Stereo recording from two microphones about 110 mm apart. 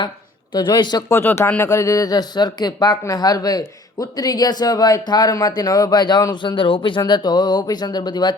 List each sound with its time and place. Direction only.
0.5 s speech: 45° left (ahead or behind)
1.1 s speech: 20° left (ahead or behind); by 7.0 s 50° left (ahead or behind)
7.0 s speech: 40° left (ahead or behind)